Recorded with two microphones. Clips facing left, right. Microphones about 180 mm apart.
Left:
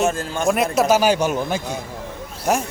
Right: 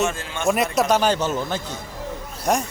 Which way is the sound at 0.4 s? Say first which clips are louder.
Left 2 dB; centre (ahead or behind).